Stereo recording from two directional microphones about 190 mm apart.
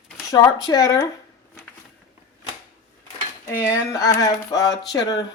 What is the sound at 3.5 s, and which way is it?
Speech, 15° left (ahead or behind).